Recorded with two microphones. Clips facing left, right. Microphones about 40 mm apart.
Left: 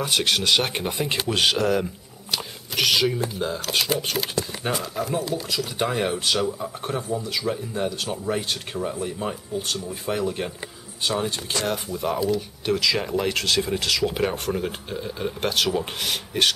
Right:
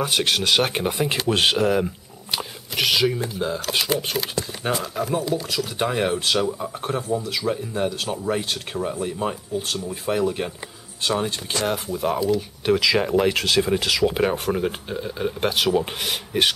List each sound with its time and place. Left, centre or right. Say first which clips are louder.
0.0 s speech: right 1 dB; centre
12.7 s speech: right 4 dB; centre